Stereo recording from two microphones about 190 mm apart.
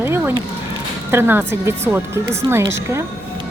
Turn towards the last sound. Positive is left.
turn(degrees=-15)  # may be behind; listen again after turning